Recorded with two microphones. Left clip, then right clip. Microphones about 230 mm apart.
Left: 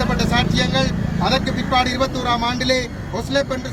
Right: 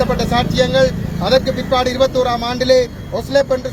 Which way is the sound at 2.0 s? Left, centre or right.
Centre.